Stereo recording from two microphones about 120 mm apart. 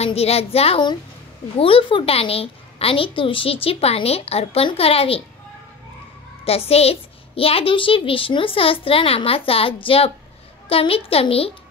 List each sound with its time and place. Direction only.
0.0 s a woman's voice: 60° left (ahead or behind)
6.4 s a woman's voice: 55° left (ahead or behind)